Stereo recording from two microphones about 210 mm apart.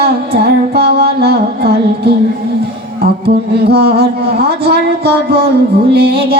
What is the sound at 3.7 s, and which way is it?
Music, 50° right (ahead or behind).